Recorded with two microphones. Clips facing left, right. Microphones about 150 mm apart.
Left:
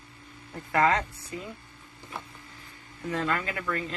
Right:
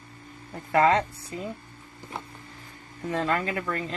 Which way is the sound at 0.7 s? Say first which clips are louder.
Right 3 dB; 30° right (ahead or behind).